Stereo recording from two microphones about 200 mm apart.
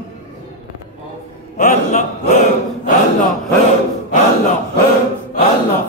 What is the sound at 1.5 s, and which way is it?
Chant, 40° left (ahead or behind).